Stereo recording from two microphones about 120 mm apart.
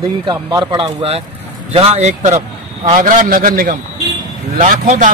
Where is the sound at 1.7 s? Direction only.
60° right (ahead or behind).